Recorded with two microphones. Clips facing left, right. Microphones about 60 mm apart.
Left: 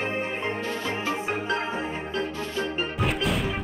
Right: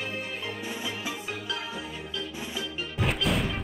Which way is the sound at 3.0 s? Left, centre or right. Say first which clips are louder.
Even; centre.